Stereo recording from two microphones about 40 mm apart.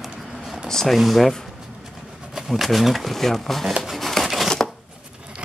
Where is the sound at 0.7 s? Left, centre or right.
Centre.